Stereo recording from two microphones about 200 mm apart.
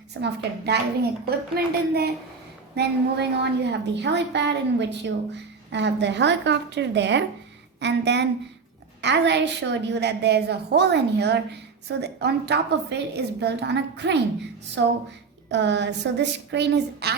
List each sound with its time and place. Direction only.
0.2 s a woman's voice: 55° right (ahead or behind)